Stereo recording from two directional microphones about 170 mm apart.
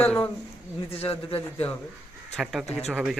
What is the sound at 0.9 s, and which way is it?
Speech, 35° left (ahead or behind).